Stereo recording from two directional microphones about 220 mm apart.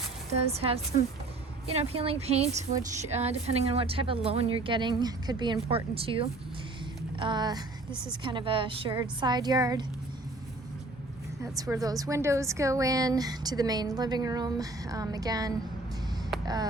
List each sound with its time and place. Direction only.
0.4 s a woman's voice: 25° right (ahead or behind)
11.4 s a woman's voice: 15° right (ahead or behind)